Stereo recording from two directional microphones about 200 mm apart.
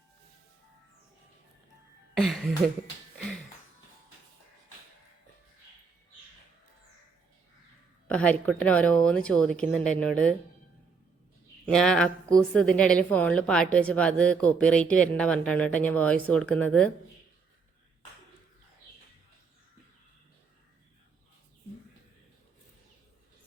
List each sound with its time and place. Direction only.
2.1 s speech: centre (ahead or behind)
8.0 s speech: 5° left (ahead or behind)
11.6 s speech: 5° left (ahead or behind)